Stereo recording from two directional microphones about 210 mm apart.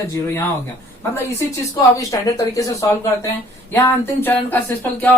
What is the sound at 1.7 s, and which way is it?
Speech, 15° left (ahead or behind).